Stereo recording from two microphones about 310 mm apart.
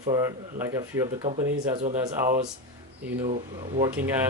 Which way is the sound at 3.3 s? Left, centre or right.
Centre.